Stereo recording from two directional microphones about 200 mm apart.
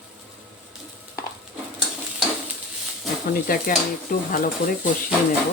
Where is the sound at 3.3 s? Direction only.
45° left (ahead or behind).